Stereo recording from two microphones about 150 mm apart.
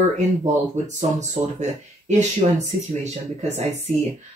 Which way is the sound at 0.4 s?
50° right (ahead or behind).